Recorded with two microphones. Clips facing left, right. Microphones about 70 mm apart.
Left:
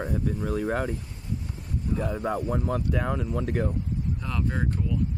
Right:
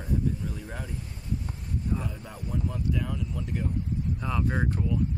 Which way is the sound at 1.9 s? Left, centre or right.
Left.